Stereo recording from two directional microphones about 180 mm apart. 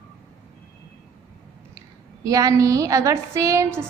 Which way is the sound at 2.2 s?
20° right (ahead or behind).